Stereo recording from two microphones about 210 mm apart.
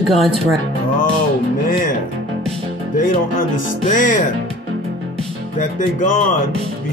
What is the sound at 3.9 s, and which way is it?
Music, 40° left (ahead or behind).